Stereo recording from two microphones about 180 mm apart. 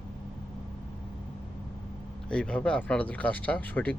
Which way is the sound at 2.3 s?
5° left (ahead or behind).